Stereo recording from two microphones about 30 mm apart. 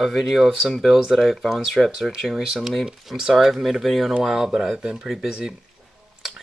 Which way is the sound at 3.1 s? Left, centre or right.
Centre.